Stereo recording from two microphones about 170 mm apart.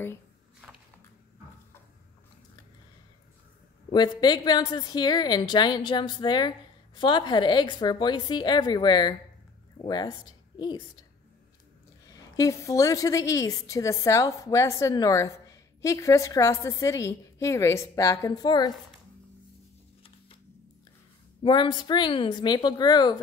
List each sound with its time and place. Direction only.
3.9 s a woman's voice: 25° left (ahead or behind)
12.1 s a woman's voice: 20° left (ahead or behind)
21.4 s a woman's voice: 30° left (ahead or behind)